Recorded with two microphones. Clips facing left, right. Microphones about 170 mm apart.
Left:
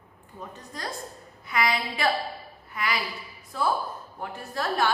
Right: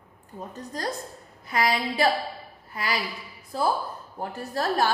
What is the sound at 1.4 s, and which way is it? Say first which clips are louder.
A woman's voice: right 2 dB; 35° right (ahead or behind).